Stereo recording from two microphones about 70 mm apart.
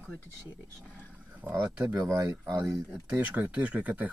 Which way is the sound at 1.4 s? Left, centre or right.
Right.